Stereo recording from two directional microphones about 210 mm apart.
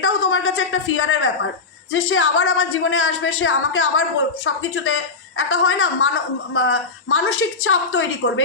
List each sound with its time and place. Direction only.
0.0 s a man's voice: 70° left (ahead or behind)